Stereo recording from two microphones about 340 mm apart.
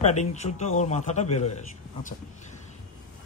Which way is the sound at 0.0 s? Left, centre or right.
Centre.